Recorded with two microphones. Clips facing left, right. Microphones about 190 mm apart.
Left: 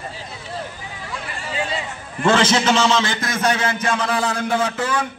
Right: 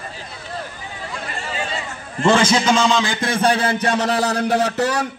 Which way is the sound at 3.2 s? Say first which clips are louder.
Right 3 dB; 30° right (ahead or behind).